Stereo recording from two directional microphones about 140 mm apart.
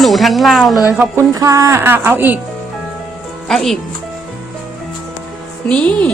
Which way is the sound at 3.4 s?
Centre (ahead or behind).